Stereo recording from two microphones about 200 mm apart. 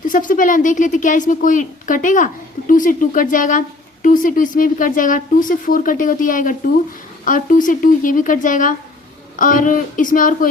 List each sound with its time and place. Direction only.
0.0 s a woman's voice: 40° left (ahead or behind)